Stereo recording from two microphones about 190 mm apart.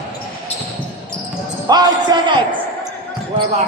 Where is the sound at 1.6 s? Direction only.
20° right (ahead or behind).